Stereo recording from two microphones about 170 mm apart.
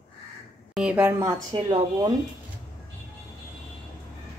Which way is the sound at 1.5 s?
30° right (ahead or behind).